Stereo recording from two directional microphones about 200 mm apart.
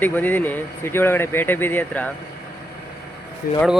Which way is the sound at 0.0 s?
10° left (ahead or behind).